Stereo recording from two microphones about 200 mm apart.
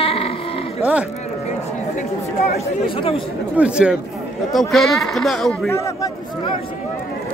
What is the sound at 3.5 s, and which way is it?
A man's voice, 5° right (ahead or behind).